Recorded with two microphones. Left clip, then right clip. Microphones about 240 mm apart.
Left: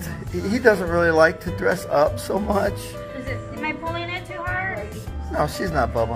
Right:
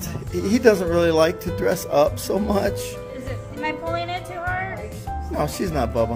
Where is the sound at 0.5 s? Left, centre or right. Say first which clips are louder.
Right 1 dB; right.